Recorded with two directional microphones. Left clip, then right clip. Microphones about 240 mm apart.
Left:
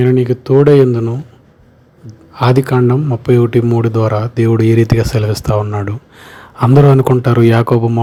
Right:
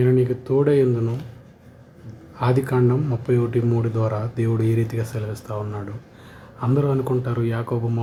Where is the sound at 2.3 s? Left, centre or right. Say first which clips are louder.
Left 9 dB; left.